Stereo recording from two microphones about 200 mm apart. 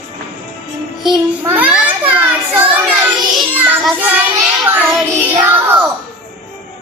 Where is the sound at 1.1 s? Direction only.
10° right (ahead or behind).